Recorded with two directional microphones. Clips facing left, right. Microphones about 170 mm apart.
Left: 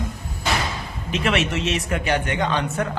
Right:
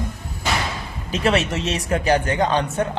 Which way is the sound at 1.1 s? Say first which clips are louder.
Right 2 dB; 35° right (ahead or behind).